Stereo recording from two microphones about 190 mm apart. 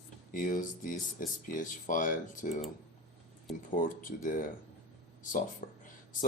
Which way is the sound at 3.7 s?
45° left (ahead or behind).